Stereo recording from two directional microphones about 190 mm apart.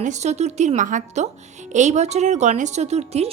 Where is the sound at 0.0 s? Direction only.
40° right (ahead or behind).